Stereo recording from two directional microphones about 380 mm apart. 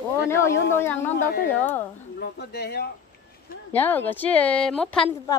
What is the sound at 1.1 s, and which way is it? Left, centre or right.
Speech, left.